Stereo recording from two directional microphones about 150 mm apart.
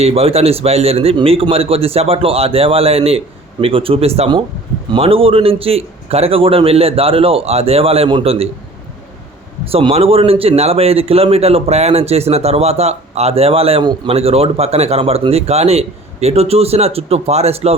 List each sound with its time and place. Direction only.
0.0 s a man's voice: 40° right (ahead or behind)
9.6 s a man's voice: 40° right (ahead or behind)